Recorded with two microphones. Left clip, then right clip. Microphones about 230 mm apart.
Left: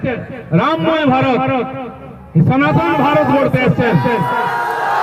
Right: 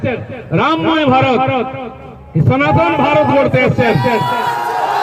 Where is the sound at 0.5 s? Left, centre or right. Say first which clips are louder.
Right 1 dB; right.